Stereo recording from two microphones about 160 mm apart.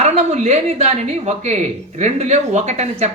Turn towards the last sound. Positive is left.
turn(degrees=-45)  # may be behind; listen again after turning